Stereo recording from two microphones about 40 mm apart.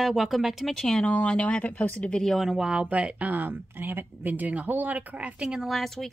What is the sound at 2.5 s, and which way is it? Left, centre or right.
Speech, centre.